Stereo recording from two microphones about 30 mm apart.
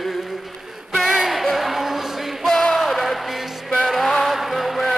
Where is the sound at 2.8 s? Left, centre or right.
Centre.